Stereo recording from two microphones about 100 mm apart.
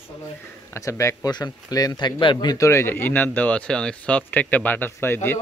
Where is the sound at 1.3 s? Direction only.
40° left (ahead or behind).